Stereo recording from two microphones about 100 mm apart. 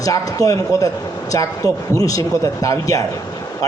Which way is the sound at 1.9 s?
35° left (ahead or behind).